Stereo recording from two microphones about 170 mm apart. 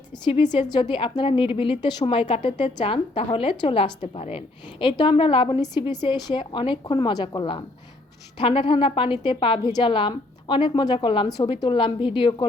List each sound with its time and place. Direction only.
0.1 s a woman's voice: 30° left (ahead or behind)